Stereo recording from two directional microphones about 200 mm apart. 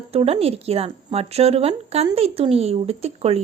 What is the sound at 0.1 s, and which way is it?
Speech, 30° right (ahead or behind).